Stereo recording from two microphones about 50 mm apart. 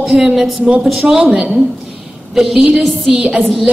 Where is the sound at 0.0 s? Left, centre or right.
Centre.